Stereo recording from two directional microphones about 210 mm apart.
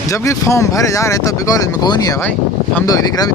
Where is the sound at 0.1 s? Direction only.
15° left (ahead or behind).